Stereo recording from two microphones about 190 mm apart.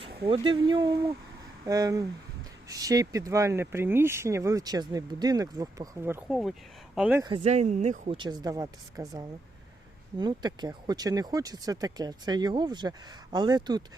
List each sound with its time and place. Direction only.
0.3 s speech: 25° right (ahead or behind)
6.2 s speech: centre (ahead or behind)
7.2 s speech: 25° right (ahead or behind)